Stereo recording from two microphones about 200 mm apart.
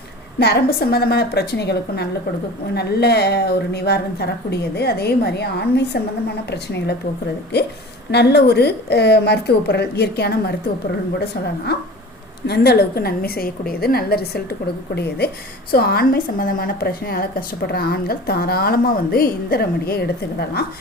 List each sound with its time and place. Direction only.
0.3 s a woman's voice: 55° left (ahead or behind)
8.1 s a woman's voice: 55° left (ahead or behind)
12.5 s a woman's voice: 55° left (ahead or behind)
15.7 s a woman's voice: 50° left (ahead or behind)